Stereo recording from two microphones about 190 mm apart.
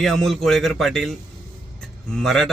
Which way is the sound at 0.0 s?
Centre (ahead or behind).